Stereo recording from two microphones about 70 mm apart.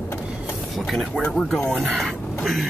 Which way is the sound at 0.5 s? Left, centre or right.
Centre.